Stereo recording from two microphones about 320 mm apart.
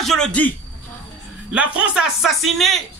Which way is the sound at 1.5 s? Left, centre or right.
Centre.